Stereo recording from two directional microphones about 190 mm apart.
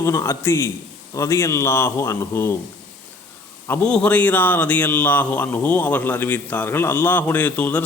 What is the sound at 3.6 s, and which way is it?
A man's voice, 10° left (ahead or behind).